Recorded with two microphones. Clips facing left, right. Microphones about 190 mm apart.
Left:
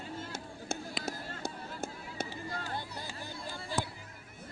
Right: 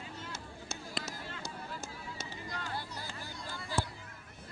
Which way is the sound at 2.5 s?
35° left (ahead or behind).